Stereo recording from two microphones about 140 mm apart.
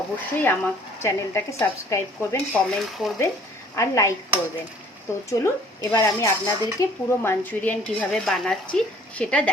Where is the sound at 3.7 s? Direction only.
20° left (ahead or behind).